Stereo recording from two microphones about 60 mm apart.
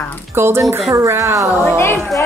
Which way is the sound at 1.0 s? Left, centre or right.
Right.